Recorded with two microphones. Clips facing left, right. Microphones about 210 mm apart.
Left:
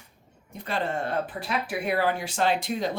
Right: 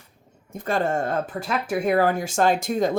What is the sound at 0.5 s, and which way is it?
Speech, 45° right (ahead or behind).